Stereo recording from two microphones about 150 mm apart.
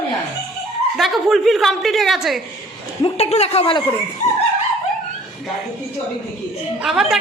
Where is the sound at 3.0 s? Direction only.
45° left (ahead or behind).